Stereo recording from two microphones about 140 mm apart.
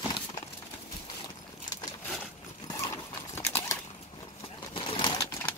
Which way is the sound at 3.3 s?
15° left (ahead or behind).